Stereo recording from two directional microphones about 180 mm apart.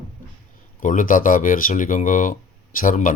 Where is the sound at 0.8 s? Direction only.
45° left (ahead or behind).